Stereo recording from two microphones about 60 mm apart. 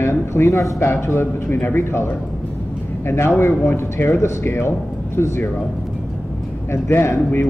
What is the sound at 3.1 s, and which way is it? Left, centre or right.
Speech, left.